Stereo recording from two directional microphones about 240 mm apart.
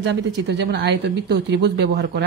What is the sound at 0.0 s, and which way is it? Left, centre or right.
Speech, right.